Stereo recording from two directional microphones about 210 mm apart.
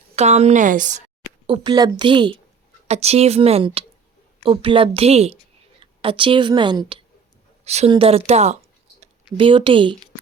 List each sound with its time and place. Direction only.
0.2 s a woman's voice: 30° right (ahead or behind)
1.5 s speech: 25° right (ahead or behind)